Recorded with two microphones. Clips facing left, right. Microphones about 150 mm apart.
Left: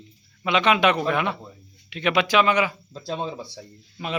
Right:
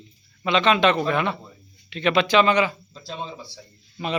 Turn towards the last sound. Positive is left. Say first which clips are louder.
# right 2 dB
turn(degrees=5)  # may be behind; listen again after turning